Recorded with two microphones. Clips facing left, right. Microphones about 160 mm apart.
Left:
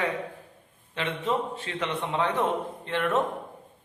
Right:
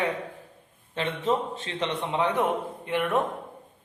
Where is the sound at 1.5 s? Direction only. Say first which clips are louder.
Right 1 dB; 25° right (ahead or behind).